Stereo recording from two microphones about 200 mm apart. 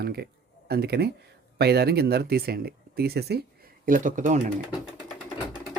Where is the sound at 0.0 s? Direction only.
55° right (ahead or behind).